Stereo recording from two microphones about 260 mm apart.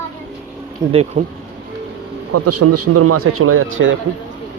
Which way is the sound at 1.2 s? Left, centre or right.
Right.